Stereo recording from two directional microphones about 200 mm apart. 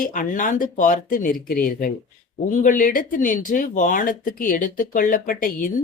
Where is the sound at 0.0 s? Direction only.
40° left (ahead or behind).